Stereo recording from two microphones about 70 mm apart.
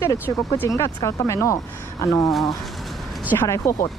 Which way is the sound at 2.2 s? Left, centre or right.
Centre.